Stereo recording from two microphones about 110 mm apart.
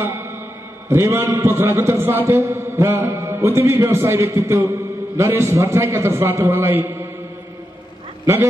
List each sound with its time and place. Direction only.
0.0 s music: 20° right (ahead or behind)
0.8 s a man's voice: 25° right (ahead or behind)